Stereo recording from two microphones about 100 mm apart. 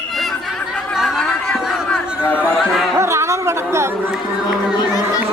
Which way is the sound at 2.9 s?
30° right (ahead or behind).